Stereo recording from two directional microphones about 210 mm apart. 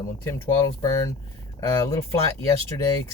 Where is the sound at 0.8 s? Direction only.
15° left (ahead or behind).